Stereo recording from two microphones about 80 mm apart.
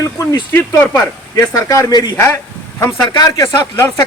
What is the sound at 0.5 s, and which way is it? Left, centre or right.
Speech, left.